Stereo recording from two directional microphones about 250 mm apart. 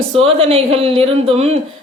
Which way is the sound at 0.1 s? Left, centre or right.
Right.